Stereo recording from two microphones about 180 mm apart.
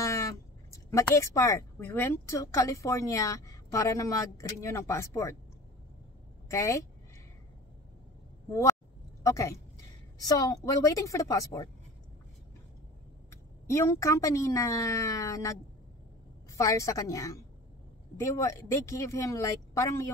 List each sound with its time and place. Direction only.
0.0 s speech: 15° left (ahead or behind)
6.5 s speech: 15° left (ahead or behind)
8.5 s a woman's voice: 15° left (ahead or behind)
13.3 s speech: 15° left (ahead or behind)
16.5 s speech: 15° left (ahead or behind)